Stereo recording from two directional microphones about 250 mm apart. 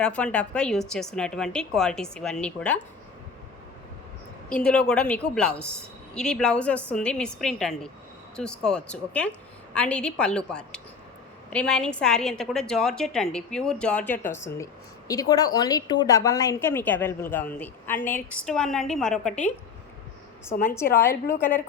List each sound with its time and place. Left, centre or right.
0.0 s a woman's voice: centre
4.4 s a woman's voice: centre
20.5 s a woman's voice: left
21.0 s a woman's voice: centre